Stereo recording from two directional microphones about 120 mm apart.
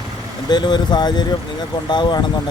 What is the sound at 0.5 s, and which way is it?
Speech, 40° left (ahead or behind).